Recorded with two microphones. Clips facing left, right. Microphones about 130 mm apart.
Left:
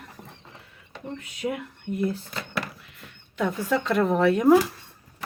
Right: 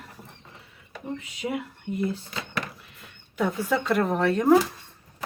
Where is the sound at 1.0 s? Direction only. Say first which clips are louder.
Left 1 dB; 5° right (ahead or behind).